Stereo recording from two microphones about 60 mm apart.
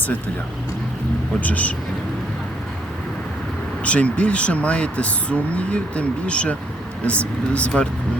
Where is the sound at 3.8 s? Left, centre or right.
Left.